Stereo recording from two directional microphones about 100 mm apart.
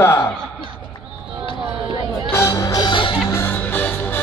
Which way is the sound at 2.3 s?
30° left (ahead or behind).